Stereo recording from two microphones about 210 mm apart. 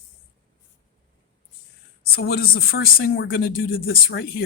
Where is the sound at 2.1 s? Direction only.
50° left (ahead or behind).